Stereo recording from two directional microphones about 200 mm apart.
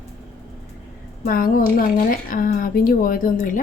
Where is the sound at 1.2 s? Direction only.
45° left (ahead or behind).